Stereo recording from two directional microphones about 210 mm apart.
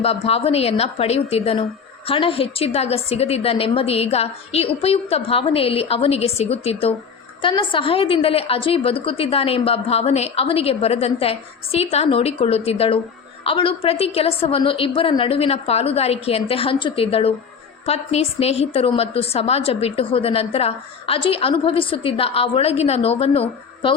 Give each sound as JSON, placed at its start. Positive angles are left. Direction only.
{"t": 0.0, "sound": "a woman's voice", "side_deg": 30}